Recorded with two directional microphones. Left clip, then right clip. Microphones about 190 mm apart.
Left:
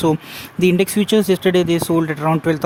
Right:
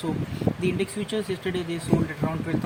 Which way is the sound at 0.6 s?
65° left (ahead or behind).